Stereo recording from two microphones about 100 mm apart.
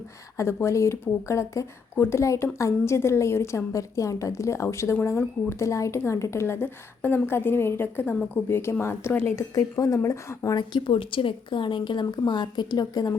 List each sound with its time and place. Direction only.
0.3 s speech: 30° left (ahead or behind)
10.6 s a woman's voice: 50° left (ahead or behind)
10.9 s a woman's voice: 65° left (ahead or behind); by 13.1 s 40° left (ahead or behind)